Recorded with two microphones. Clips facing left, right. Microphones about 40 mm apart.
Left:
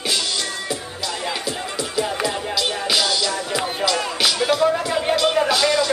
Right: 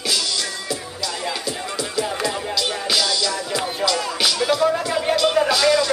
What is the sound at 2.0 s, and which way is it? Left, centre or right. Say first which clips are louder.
Music: left 1 dB; centre.